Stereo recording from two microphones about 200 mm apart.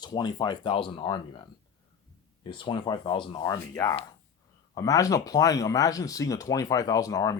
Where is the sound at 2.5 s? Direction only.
25° left (ahead or behind).